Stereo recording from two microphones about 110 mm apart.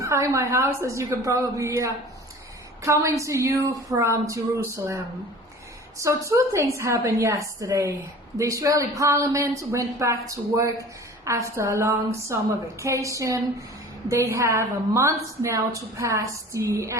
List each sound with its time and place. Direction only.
0.0 s a woman's voice: 25° right (ahead or behind)
6.2 s a woman's voice: 30° right (ahead or behind)